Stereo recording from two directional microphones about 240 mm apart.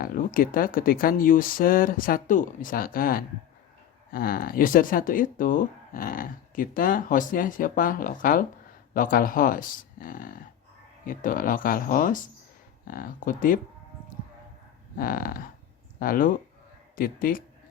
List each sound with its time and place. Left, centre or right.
0.0 s speech: left
14.9 s speech: left